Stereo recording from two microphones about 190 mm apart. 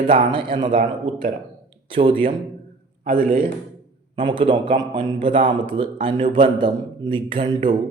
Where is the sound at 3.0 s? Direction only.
50° right (ahead or behind).